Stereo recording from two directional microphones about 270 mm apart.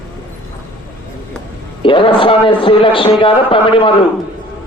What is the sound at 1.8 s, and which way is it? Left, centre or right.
Speech, centre.